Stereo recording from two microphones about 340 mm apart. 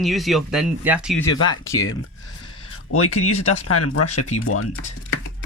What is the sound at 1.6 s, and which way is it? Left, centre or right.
Speech, centre.